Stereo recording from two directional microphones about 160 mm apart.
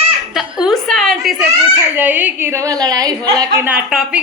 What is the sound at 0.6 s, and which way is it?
Speech, 5° left (ahead or behind).